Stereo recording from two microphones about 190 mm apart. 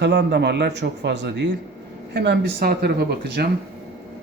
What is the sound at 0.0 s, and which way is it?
A man's voice, 65° right (ahead or behind).